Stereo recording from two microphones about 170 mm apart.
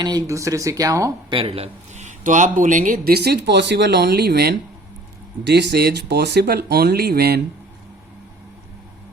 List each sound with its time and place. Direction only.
0.0 s speech: 25° right (ahead or behind)
1.3 s speech: 35° right (ahead or behind); by 4.5 s 70° right (ahead or behind)
5.5 s speech: 85° right; by 7.4 s 65° right (ahead or behind)